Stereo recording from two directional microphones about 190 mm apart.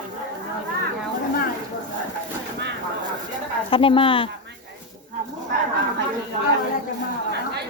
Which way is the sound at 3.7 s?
30° left (ahead or behind).